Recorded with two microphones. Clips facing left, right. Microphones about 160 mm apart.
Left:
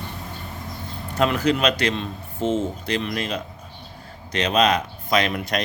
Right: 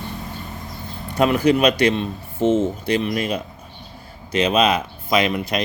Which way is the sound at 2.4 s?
50° right (ahead or behind).